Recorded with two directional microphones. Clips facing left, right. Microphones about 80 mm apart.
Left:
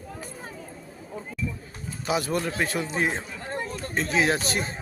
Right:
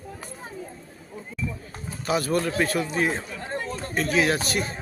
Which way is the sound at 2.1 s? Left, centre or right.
Centre.